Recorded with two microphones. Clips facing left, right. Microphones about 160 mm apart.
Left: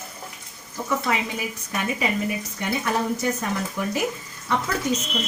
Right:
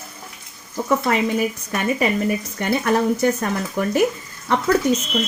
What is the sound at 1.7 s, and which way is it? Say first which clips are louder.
A woman's voice: right 3 dB; 55° right (ahead or behind).